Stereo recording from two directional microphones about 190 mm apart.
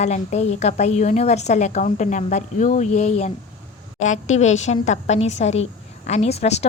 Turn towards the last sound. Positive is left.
turn(degrees=35)  # may be behind; listen again after turning